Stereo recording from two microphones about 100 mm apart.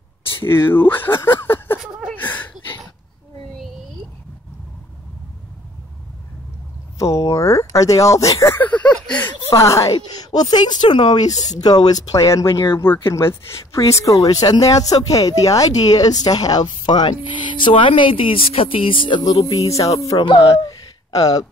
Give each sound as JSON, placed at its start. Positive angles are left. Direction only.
{"t": 0.5, "sound": "speech", "side_deg": 25}
{"t": 1.8, "sound": "a sound", "side_deg": -5}
{"t": 2.1, "sound": "speech", "side_deg": 15}
{"t": 7.0, "sound": "speech", "side_deg": 35}
{"t": 8.5, "sound": "a sound", "side_deg": 15}
{"t": 9.5, "sound": "speech", "side_deg": 30}
{"t": 9.9, "sound": "speech", "side_deg": 45}